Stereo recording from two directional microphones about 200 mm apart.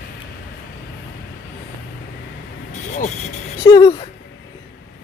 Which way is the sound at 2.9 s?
35° left (ahead or behind).